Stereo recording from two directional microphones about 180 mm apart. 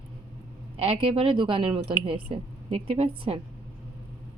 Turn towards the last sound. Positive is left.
turn(degrees=-30)  # may be behind; listen again after turning